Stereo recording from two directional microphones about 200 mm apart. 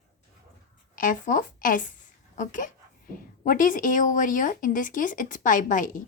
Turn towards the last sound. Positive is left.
turn(degrees=40)  # may be behind; listen again after turning